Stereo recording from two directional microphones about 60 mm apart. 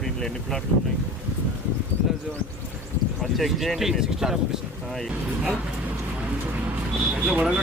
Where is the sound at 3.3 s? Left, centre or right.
Centre.